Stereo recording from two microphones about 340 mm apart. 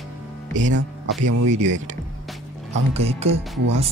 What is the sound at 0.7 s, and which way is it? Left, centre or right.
Speech, right.